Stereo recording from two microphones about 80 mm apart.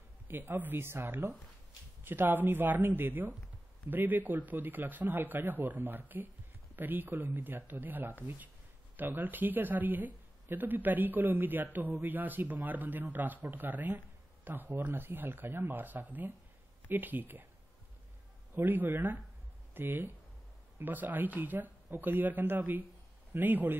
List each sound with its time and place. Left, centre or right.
0.3 s speech: right
18.5 s speech: right